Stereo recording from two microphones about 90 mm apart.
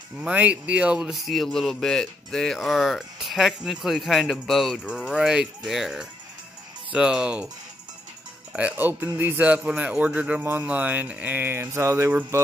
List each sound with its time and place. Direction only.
0.2 s speech: 15° right (ahead or behind)
4.7 s speech: 10° right (ahead or behind)
8.5 s speech: 20° right (ahead or behind)